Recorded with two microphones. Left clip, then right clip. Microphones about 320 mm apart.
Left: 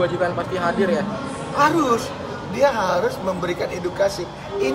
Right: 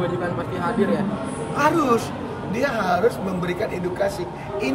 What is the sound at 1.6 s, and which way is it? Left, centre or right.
A woman's voice, centre.